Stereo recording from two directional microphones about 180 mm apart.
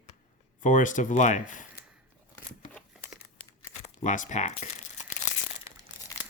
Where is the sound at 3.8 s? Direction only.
45° left (ahead or behind).